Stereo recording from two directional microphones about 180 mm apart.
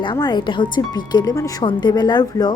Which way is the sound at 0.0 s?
25° left (ahead or behind).